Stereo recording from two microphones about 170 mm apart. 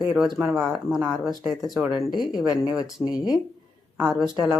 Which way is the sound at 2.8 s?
5° right (ahead or behind).